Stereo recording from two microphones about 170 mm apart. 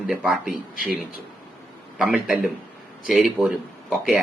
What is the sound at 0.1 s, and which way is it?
Speech, 5° right (ahead or behind).